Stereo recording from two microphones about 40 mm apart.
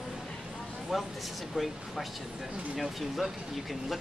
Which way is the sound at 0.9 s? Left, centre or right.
Centre.